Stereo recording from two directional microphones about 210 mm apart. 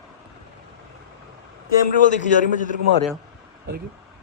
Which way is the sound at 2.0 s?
35° left (ahead or behind).